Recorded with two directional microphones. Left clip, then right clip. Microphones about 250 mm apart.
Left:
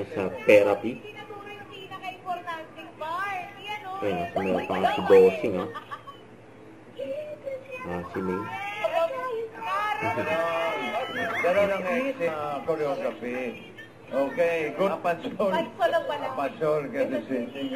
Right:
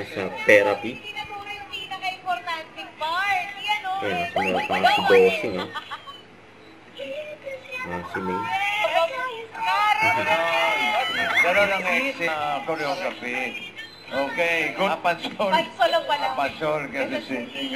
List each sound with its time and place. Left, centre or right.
0.5 s speech: right
2.4 s a sound: centre
4.7 s a man's voice: centre
7.7 s music: centre
14.1 s a man's voice: centre